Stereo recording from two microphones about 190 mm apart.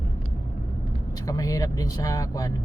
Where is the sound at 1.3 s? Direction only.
20° left (ahead or behind).